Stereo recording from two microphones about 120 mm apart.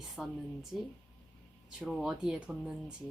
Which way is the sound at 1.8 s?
5° right (ahead or behind).